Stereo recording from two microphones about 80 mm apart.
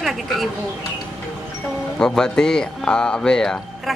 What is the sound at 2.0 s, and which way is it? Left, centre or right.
A woman's voice, centre.